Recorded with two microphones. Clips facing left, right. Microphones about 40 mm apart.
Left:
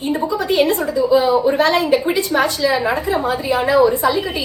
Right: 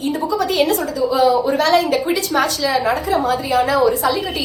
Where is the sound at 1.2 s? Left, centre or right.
Left.